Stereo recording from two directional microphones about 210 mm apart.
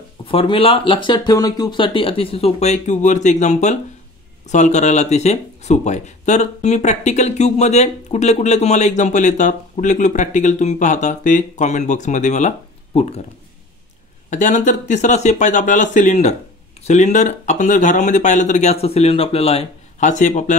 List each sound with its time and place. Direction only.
0.2 s speech: 25° left (ahead or behind)
14.3 s speech: 35° left (ahead or behind)